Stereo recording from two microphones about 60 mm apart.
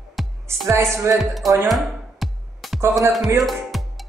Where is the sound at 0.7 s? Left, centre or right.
Right.